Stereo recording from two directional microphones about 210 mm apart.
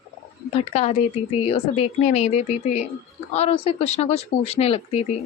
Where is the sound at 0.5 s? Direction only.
30° left (ahead or behind).